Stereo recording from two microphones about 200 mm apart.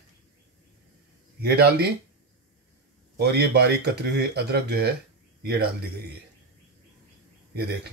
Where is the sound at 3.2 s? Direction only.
55° right (ahead or behind).